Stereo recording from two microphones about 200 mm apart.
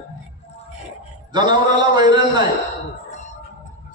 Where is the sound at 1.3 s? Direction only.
20° right (ahead or behind).